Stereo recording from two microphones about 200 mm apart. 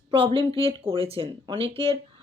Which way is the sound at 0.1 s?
25° right (ahead or behind).